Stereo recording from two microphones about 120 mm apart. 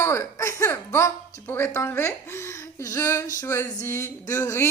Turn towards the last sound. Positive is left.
turn(degrees=25)  # may be behind; listen again after turning